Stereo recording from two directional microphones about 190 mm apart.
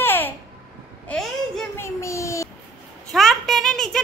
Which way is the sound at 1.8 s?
15° left (ahead or behind).